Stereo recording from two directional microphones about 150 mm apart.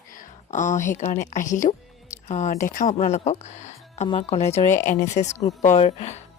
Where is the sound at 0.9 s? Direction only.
50° left (ahead or behind).